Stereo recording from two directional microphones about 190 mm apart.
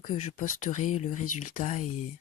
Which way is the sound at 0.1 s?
40° left (ahead or behind).